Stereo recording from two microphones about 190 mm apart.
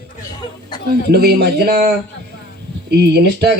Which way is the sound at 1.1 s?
60° right (ahead or behind).